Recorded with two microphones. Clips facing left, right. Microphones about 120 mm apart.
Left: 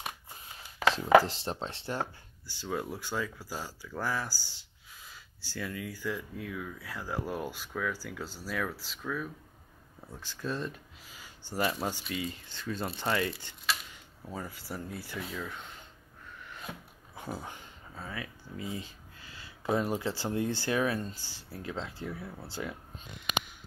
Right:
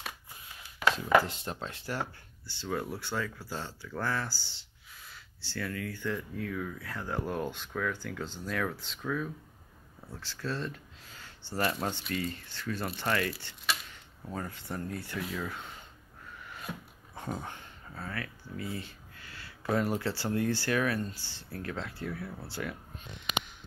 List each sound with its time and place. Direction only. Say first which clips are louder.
0.9 s speech: left 6 dB; 35° left (ahead or behind)
2.0 s speech: left 1 dB; 15° left (ahead or behind)
10.1 s speech: even; 15° left (ahead or behind); by 15.6 s centre (ahead or behind)
16.6 s speech: right 3 dB; 5° left (ahead or behind); by 22.8 s 20° left (ahead or behind)